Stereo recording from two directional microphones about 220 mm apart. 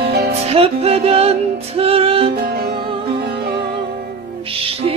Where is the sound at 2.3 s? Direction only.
45° right (ahead or behind).